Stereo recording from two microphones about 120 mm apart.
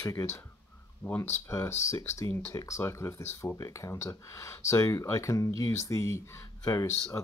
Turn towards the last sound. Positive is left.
turn(degrees=25)  # may be behind; listen again after turning